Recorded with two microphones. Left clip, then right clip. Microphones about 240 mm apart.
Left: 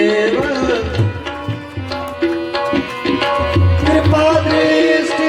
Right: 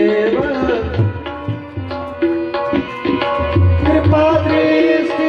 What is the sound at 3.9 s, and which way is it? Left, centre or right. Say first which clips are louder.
Music: even; centre.